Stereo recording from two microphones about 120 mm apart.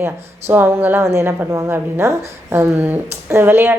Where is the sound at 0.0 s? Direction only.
15° right (ahead or behind).